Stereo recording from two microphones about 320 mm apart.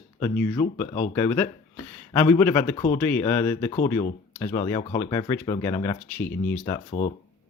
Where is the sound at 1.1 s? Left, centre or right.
Centre.